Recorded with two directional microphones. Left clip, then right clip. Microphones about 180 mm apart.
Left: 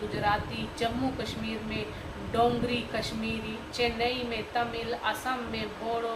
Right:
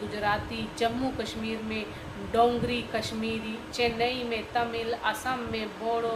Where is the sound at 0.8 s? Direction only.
45° right (ahead or behind).